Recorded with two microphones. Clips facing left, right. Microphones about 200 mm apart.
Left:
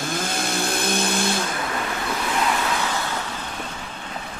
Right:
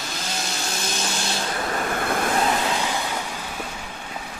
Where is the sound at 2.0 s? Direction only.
55° right (ahead or behind).